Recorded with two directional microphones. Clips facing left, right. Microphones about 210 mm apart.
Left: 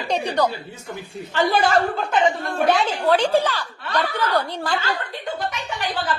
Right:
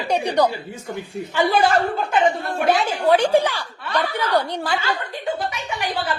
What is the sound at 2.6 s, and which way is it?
A woman's voice, 10° right (ahead or behind).